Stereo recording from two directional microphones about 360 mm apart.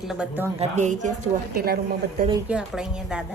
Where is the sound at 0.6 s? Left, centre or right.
Centre.